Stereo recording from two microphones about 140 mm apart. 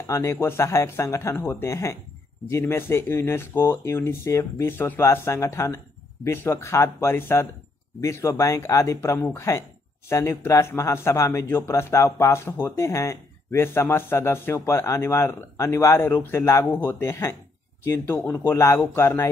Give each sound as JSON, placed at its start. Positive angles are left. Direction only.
{"t": 0.0, "sound": "speech", "side_deg": 20}